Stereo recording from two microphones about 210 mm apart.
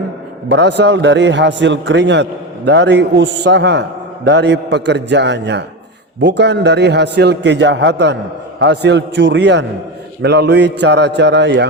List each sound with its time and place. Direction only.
0.4 s a man's voice: 55° right (ahead or behind)